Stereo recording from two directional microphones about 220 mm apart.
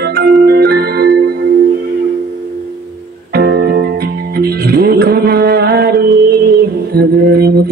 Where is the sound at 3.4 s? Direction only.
50° right (ahead or behind).